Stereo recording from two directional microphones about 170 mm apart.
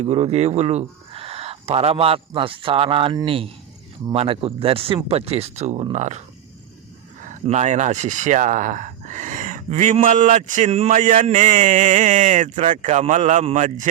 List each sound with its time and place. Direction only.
0.0 s a man's voice: 40° right (ahead or behind)